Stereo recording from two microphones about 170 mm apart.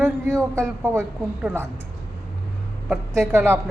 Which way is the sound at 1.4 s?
15° right (ahead or behind).